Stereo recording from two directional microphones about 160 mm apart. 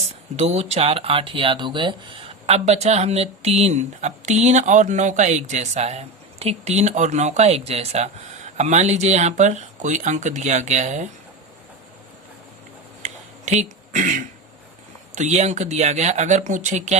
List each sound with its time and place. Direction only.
0.3 s speech: 40° right (ahead or behind)
13.0 s a sound: 45° right (ahead or behind)
15.1 s speech: 45° right (ahead or behind)